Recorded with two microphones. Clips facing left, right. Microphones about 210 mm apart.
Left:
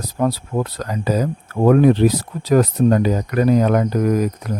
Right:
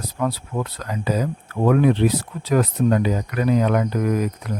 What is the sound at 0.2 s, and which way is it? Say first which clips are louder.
Speech: left 5 dB; 40° left (ahead or behind).